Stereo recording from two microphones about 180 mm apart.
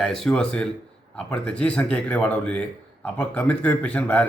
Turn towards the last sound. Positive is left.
turn(degrees=5)  # may be behind; listen again after turning